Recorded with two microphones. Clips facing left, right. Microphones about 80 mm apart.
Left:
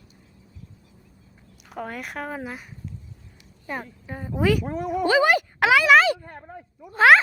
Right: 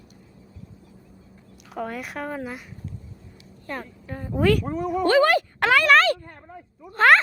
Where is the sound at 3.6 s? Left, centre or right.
Centre.